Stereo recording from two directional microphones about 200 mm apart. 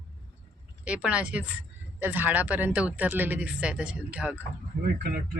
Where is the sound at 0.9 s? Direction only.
5° right (ahead or behind).